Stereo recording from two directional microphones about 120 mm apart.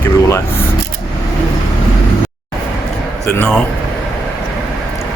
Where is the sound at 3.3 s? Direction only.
10° left (ahead or behind).